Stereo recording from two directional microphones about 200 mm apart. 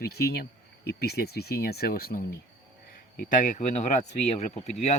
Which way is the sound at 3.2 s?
40° left (ahead or behind).